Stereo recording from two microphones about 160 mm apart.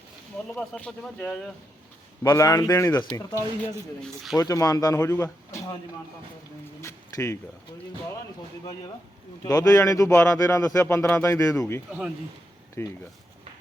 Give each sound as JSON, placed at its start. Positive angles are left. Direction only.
{"t": 0.7, "sound": "speech", "side_deg": 5}
{"t": 2.2, "sound": "speech", "side_deg": 20}
{"t": 4.0, "sound": "speech", "side_deg": 0}
{"t": 4.4, "sound": "speech", "side_deg": 25}
{"t": 6.8, "sound": "a sound", "side_deg": 20}
{"t": 9.4, "sound": "speech", "side_deg": 20}
{"t": 11.9, "sound": "speech", "side_deg": -5}
{"t": 12.8, "sound": "speech", "side_deg": 15}